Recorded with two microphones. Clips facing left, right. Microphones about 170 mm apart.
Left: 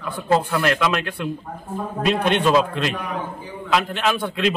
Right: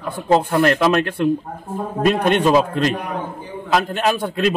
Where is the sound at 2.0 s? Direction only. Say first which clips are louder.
Right 3 dB; 45° right (ahead or behind).